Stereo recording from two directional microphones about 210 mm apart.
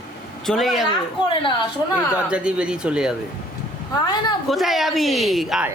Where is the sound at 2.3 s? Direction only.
5° right (ahead or behind).